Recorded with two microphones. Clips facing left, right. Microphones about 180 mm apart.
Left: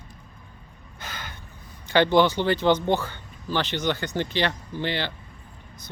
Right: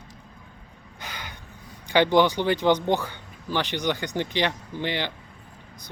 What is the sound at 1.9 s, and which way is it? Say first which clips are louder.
Speech: even; 15° right (ahead or behind).